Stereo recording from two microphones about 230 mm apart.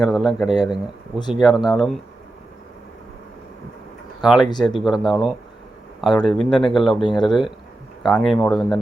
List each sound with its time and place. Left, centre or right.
0.1 s speech: centre
4.4 s speech: centre
4.8 s speech: centre